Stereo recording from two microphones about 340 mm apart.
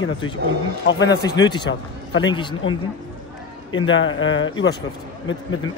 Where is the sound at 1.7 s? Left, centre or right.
Left.